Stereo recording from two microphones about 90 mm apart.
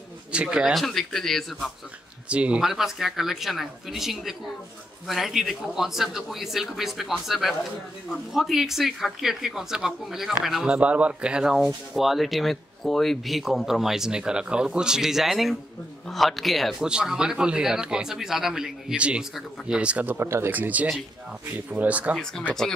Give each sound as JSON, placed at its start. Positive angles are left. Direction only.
{"t": 0.3, "sound": "speech", "side_deg": -10}
{"t": 0.8, "sound": "speech", "side_deg": 5}
{"t": 2.2, "sound": "speech", "side_deg": -15}
{"t": 20.2, "sound": "speech", "side_deg": -25}
{"t": 22.1, "sound": "speech", "side_deg": 5}